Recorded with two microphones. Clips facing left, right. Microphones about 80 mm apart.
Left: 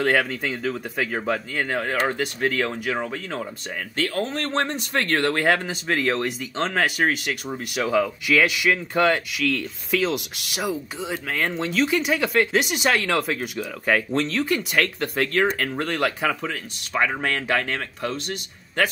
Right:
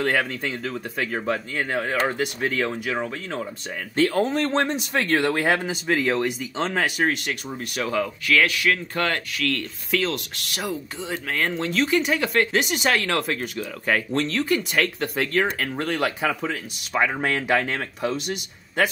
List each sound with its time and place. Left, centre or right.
0.0 s speech: centre
3.9 s speech: right; by 8.1 s centre
8.3 s speech: centre